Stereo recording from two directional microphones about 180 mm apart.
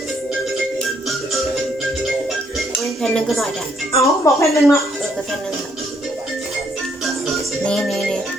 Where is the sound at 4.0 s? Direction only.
15° left (ahead or behind).